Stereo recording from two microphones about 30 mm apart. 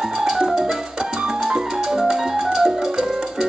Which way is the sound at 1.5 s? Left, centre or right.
Right.